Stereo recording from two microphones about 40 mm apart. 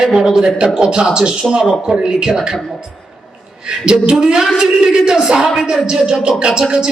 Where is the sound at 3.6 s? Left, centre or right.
Right.